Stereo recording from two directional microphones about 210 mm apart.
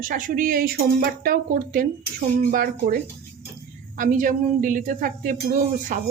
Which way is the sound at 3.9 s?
40° right (ahead or behind).